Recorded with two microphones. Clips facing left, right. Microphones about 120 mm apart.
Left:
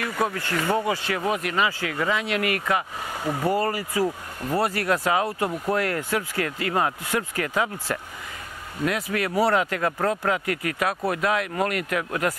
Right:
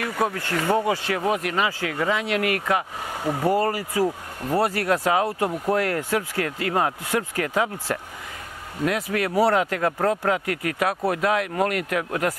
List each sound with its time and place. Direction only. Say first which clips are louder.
0.0 s speech: right 1 dB; 40° right (ahead or behind)
3.3 s speech: right 2 dB; 30° right (ahead or behind)
3.5 s speech: right 2 dB; 45° right (ahead or behind)
4.0 s speech: right 2 dB; 35° right (ahead or behind)